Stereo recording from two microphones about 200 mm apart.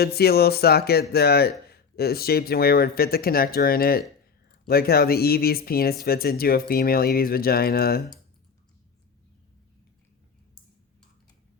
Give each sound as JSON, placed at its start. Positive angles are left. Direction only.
{"t": 0.0, "sound": "speech", "side_deg": 50}